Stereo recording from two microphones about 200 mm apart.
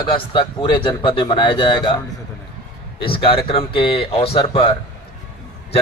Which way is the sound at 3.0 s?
25° left (ahead or behind).